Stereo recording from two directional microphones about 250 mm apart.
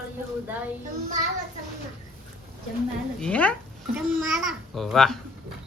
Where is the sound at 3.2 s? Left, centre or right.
Centre.